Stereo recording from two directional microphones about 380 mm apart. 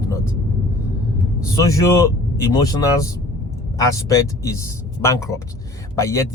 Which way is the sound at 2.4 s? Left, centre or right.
Centre.